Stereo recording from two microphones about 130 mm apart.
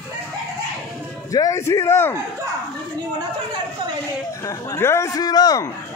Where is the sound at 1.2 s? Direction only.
25° left (ahead or behind).